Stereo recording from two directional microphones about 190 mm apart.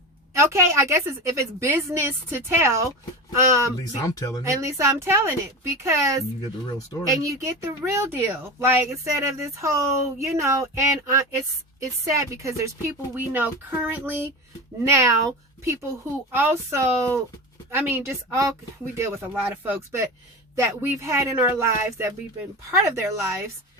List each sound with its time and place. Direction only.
0.3 s speech: 15° right (ahead or behind)
4.0 s speech: 15° left (ahead or behind)
4.4 s speech: 15° right (ahead or behind)
16.3 s speech: 10° right (ahead or behind)